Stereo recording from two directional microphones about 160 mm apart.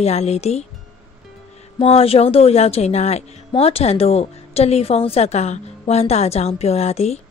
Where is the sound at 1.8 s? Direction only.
35° left (ahead or behind).